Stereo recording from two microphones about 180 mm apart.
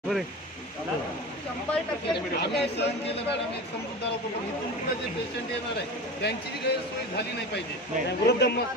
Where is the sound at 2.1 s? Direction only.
70° left (ahead or behind).